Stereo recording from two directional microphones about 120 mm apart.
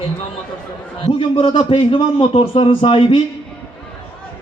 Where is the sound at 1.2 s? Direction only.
45° left (ahead or behind).